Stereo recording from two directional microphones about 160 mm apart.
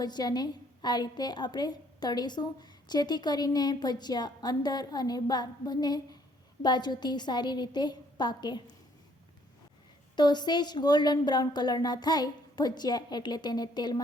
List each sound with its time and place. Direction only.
0.0 s a woman's voice: 25° left (ahead or behind)
10.2 s a woman's voice: 25° left (ahead or behind)